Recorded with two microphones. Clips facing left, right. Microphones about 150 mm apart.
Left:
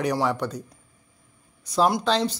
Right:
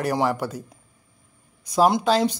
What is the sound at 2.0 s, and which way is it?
Speech, 10° right (ahead or behind).